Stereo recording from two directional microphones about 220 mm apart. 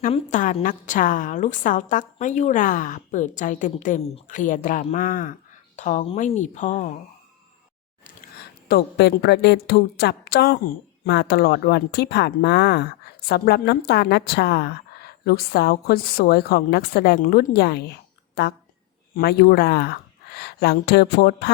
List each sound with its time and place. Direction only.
0.0 s a woman's voice: 35° left (ahead or behind)
8.7 s a woman's voice: 45° left (ahead or behind)